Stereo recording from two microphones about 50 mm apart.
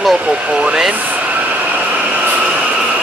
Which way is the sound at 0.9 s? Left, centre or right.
Right.